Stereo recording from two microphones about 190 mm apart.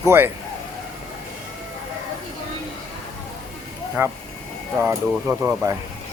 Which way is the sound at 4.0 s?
10° right (ahead or behind).